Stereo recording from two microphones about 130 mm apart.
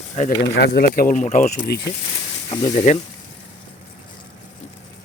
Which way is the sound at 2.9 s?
75° left (ahead or behind).